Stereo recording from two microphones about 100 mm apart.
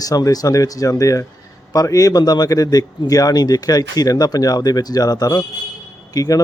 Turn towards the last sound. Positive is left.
turn(degrees=40)  # may be behind; listen again after turning